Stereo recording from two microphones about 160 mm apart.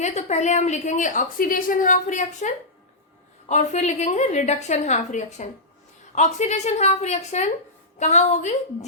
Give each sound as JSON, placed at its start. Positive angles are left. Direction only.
{"t": 0.0, "sound": "a woman's voice", "side_deg": 45}